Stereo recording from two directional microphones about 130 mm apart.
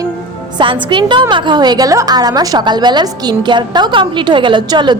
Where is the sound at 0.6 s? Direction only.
40° right (ahead or behind).